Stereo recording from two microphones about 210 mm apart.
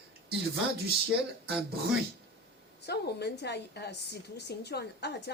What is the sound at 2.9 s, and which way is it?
A woman's voice, 50° left (ahead or behind).